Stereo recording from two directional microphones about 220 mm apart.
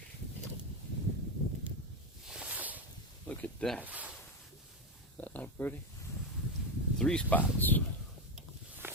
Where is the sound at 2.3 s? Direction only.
5° right (ahead or behind).